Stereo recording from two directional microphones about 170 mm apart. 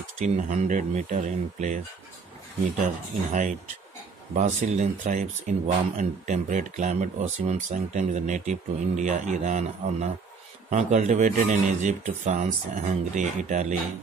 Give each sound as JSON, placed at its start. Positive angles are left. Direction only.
{"t": 0.2, "sound": "speech", "side_deg": -45}
{"t": 3.3, "sound": "speech", "side_deg": -45}